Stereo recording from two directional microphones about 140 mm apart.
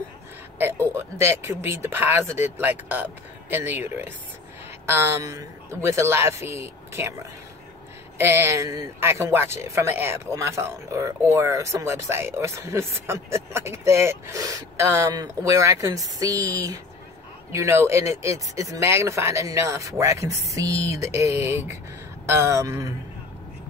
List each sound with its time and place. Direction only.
0.6 s a man's voice: 15° right (ahead or behind)
8.2 s a man's voice: 15° right (ahead or behind)